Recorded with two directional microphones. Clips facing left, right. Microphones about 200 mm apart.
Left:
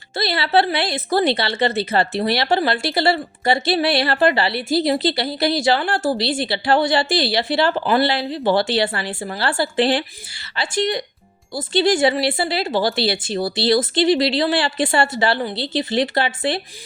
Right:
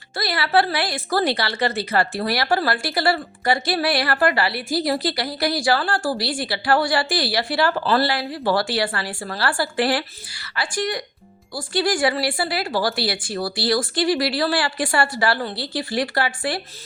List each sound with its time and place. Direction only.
0.1 s speech: 25° left (ahead or behind)